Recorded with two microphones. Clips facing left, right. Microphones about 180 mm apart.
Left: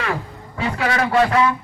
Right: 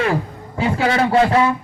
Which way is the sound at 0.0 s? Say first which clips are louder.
Right 5 dB; 30° right (ahead or behind).